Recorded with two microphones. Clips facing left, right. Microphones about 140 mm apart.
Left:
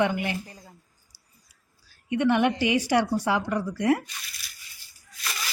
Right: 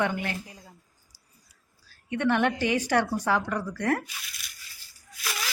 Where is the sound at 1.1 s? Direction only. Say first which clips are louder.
Right 1 dB; 10° left (ahead or behind).